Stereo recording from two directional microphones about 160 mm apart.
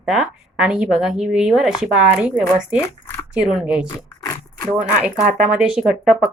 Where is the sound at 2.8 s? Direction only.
20° left (ahead or behind).